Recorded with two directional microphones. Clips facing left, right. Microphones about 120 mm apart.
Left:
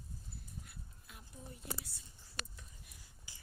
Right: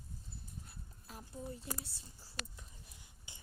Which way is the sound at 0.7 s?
35° right (ahead or behind).